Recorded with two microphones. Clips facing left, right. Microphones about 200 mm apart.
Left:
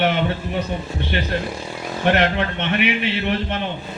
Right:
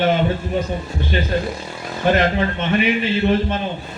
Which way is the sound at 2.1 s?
65° left (ahead or behind).